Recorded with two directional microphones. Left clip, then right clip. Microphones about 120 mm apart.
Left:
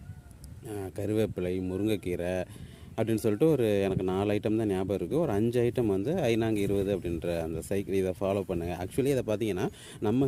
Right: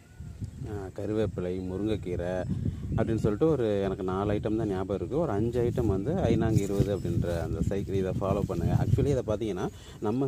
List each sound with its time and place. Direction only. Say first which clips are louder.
0.7 s speech: left 1 dB; 40° left (ahead or behind)